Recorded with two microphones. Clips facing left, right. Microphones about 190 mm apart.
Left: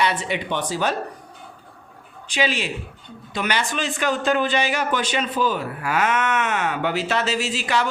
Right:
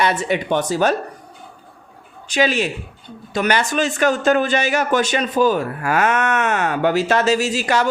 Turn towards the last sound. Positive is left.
turn(degrees=-45)  # may be behind; listen again after turning